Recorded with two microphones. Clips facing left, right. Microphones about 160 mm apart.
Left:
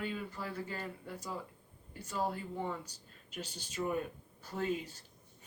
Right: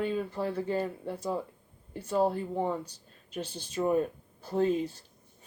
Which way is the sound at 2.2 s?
30° right (ahead or behind).